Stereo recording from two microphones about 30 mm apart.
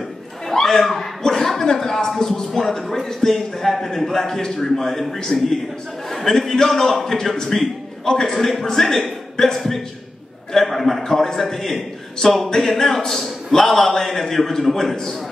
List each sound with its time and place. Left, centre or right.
0.5 s chuckle: centre
1.6 s a sound: centre
2.2 s a man's voice: centre